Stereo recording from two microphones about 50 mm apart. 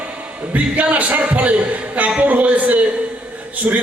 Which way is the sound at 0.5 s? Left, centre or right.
Right.